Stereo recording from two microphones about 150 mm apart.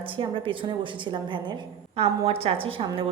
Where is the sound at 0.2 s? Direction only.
35° right (ahead or behind).